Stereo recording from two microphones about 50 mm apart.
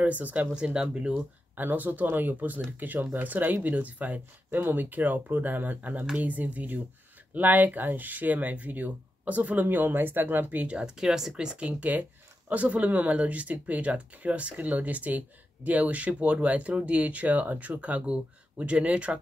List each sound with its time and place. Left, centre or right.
0.0 s speech: right
1.5 s speech: right
9.7 s speech: right
11.1 s speech: centre